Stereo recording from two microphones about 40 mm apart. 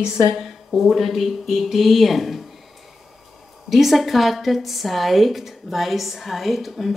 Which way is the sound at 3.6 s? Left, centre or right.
Centre.